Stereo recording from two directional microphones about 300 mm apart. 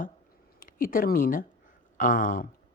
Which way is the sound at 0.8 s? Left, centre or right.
Left.